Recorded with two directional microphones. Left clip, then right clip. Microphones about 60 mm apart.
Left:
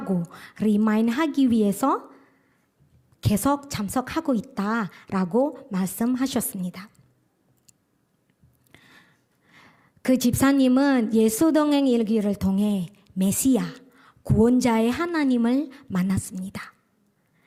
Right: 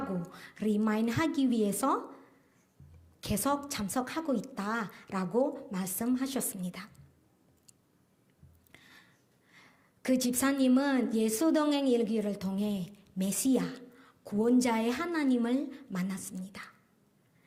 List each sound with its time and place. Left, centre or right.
0.1 s a woman's voice: left
6.1 s speech: left
6.5 s a woman's voice: left
8.7 s a woman's voice: left